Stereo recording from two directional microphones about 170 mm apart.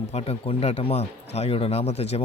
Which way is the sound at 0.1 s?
40° left (ahead or behind).